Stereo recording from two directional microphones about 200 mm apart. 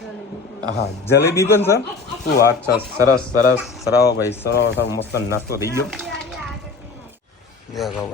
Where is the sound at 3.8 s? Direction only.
55° left (ahead or behind).